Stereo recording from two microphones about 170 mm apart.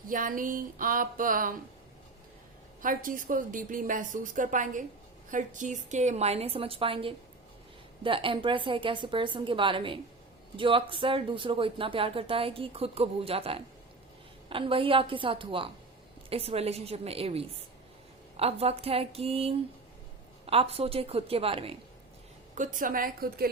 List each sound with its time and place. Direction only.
0.1 s a woman's voice: 55° right (ahead or behind)
2.8 s a woman's voice: 50° right (ahead or behind); by 21.8 s 35° right (ahead or behind)
22.5 s a woman's voice: 50° right (ahead or behind)